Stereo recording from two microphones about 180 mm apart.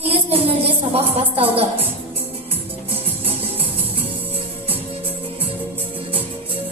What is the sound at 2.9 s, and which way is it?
Music, 30° right (ahead or behind).